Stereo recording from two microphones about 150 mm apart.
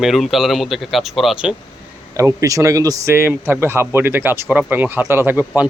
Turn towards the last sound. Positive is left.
turn(degrees=-10)  # may be behind; listen again after turning